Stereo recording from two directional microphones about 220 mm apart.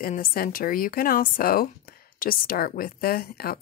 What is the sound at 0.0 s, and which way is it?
A woman's voice, 40° left (ahead or behind).